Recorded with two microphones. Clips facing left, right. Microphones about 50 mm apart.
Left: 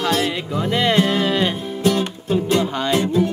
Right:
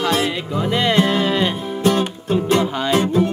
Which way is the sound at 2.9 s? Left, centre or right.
Right.